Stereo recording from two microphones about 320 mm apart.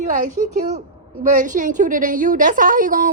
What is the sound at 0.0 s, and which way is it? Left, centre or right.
A woman's voice, right.